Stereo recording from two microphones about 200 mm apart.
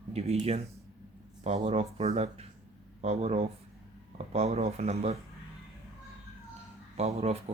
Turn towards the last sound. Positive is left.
turn(degrees=-30)  # may be behind; listen again after turning